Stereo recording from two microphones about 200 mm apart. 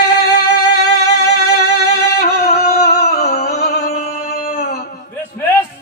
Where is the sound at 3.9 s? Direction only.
35° left (ahead or behind).